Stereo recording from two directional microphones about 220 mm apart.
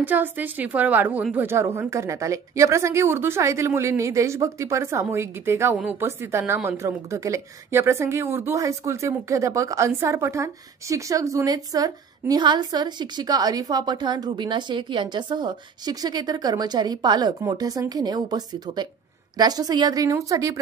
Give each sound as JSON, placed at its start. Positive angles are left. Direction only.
{"t": 0.0, "sound": "a woman's voice", "side_deg": -10}